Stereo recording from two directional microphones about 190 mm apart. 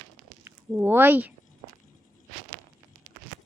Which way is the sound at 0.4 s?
10° right (ahead or behind).